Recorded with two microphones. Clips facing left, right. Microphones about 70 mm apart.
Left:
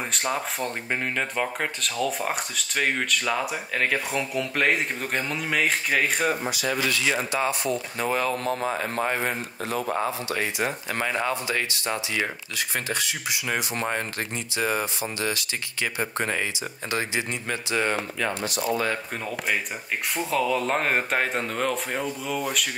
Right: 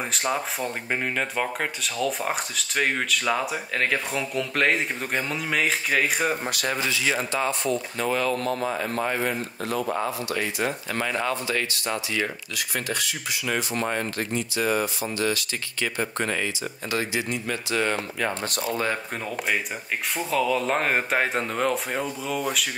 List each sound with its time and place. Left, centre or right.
0.1 s speech: centre
8.0 s speech: centre
10.6 s speech: left
17.7 s speech: centre
20.2 s speech: centre